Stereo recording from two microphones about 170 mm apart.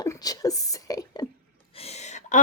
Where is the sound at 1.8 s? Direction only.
40° left (ahead or behind).